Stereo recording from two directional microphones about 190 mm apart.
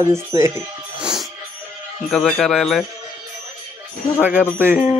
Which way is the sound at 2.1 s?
5° left (ahead or behind).